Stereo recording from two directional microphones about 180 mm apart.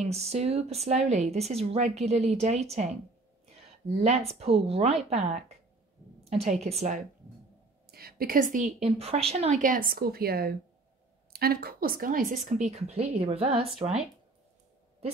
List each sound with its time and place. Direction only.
0.0 s a woman's voice: 35° right (ahead or behind)
4.0 s a woman's voice: 35° right (ahead or behind)
7.9 s a woman's voice: 55° right (ahead or behind)
8.7 s a woman's voice: 35° right (ahead or behind)